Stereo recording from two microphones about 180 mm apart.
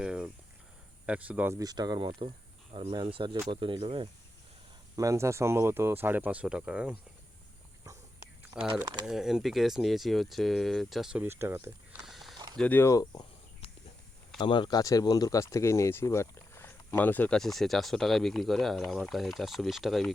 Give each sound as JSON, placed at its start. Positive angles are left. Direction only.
{"t": 0.0, "sound": "speech", "side_deg": -5}
{"t": 4.9, "sound": "speech", "side_deg": -15}
{"t": 8.5, "sound": "speech", "side_deg": -20}
{"t": 9.0, "sound": "speech", "side_deg": 0}
{"t": 12.0, "sound": "mechanisms", "side_deg": 0}
{"t": 12.5, "sound": "speech", "side_deg": 10}
{"t": 14.3, "sound": "speech", "side_deg": 25}